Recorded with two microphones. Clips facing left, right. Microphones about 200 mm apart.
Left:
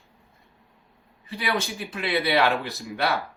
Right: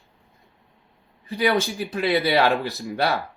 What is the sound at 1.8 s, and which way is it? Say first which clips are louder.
Speech: right 5 dB; 35° right (ahead or behind).